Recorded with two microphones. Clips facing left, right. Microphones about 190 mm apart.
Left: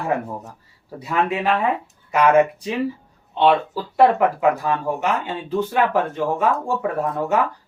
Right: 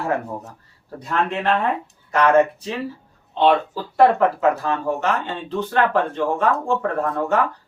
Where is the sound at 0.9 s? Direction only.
5° left (ahead or behind).